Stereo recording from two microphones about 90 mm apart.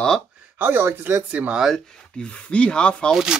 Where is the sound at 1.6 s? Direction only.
5° left (ahead or behind).